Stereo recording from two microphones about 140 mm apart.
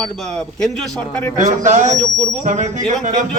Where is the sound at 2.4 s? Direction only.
60° right (ahead or behind).